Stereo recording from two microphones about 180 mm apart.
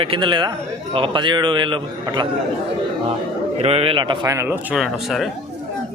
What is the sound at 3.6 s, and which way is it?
A man's voice, 30° right (ahead or behind).